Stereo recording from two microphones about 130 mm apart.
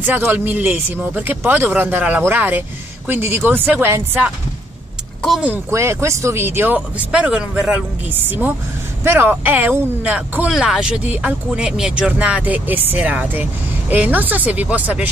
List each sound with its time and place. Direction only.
0.0 s speech: 15° right (ahead or behind)
5.7 s speech: 20° right (ahead or behind)